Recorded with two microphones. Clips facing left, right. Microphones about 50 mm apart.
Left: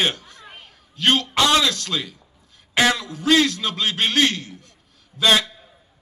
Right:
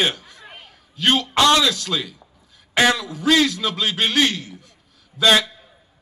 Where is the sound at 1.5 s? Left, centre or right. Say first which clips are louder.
Right 2 dB; left.